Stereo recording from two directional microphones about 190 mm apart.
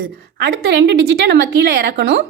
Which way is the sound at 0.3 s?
60° right (ahead or behind).